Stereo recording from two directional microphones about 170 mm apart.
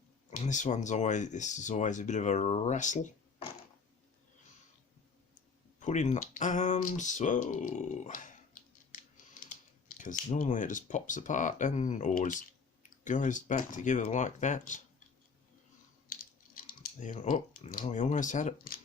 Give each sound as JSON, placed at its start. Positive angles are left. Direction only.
{"t": 0.3, "sound": "speech", "side_deg": 45}
{"t": 5.8, "sound": "speech", "side_deg": 45}
{"t": 10.0, "sound": "speech", "side_deg": 45}
{"t": 17.0, "sound": "speech", "side_deg": 45}